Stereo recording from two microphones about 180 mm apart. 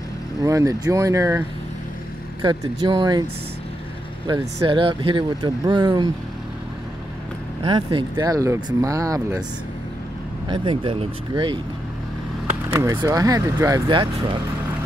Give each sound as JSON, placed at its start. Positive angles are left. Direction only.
{"t": 0.4, "sound": "speech", "side_deg": -15}
{"t": 2.4, "sound": "speech", "side_deg": -25}
{"t": 4.3, "sound": "speech", "side_deg": -25}
{"t": 7.6, "sound": "speech", "side_deg": -25}
{"t": 10.5, "sound": "speech", "side_deg": -30}
{"t": 12.6, "sound": "speech", "side_deg": -20}